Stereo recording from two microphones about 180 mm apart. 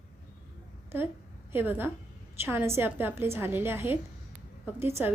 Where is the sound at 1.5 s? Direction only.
10° right (ahead or behind).